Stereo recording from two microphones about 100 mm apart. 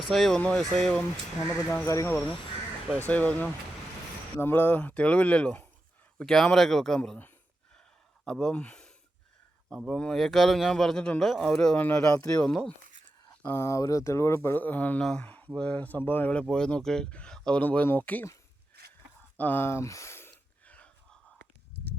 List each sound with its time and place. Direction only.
0.1 s a man's voice: centre (ahead or behind)
1.7 s speech: 30° left (ahead or behind)
3.1 s a man's voice: 15° left (ahead or behind)
8.2 s speech: 5° left (ahead or behind)
9.6 s a man's voice: centre (ahead or behind)
12.0 s speech: 35° left (ahead or behind)
12.4 s speech: 10° left (ahead or behind)
13.4 s speech: 25° left (ahead or behind)
19.4 s speech: 20° left (ahead or behind)
20.7 s whispering: 15° left (ahead or behind)